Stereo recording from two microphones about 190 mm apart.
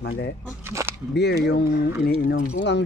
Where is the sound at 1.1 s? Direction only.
60° left (ahead or behind).